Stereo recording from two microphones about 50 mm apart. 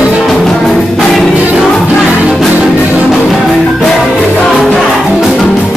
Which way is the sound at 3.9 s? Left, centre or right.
Centre.